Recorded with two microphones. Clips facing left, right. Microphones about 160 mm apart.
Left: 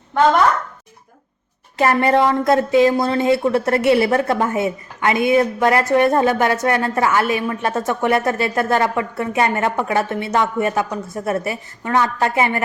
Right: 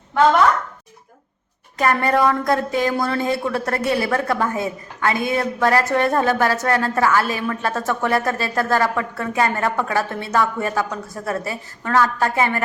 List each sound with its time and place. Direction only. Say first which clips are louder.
1.8 s a woman's voice: left 2 dB; 25° left (ahead or behind)